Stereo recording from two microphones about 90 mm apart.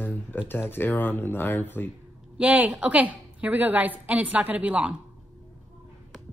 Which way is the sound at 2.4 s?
15° right (ahead or behind).